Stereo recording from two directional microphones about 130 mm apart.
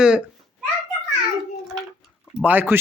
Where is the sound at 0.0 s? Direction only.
5° right (ahead or behind).